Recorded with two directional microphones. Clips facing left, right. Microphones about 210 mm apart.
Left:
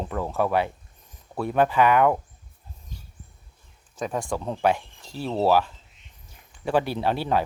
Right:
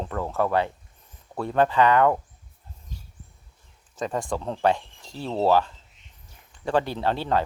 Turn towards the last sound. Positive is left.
turn(degrees=10)  # may be behind; listen again after turning